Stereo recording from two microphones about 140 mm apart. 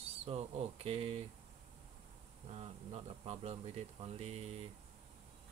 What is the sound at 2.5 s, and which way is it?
Speech, 50° right (ahead or behind).